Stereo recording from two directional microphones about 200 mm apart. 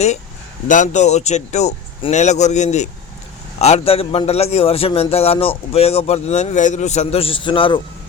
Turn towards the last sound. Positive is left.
turn(degrees=25)  # may be behind; listen again after turning